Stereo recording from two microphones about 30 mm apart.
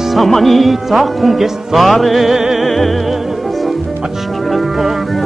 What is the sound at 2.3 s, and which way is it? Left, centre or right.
Music, centre.